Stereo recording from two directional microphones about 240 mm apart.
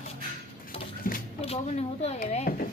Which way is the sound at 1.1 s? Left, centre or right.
Left.